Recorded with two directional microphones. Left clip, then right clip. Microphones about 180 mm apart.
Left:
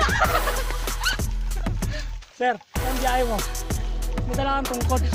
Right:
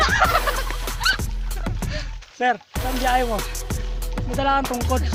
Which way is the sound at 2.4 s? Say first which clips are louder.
Right 3 dB; 15° right (ahead or behind).